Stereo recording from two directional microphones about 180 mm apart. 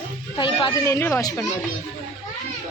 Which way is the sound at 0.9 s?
15° left (ahead or behind).